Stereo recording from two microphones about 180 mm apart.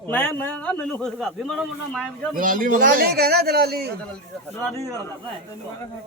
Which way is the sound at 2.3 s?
50° right (ahead or behind).